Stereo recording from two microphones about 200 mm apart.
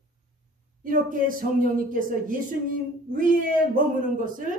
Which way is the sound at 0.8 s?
45° right (ahead or behind).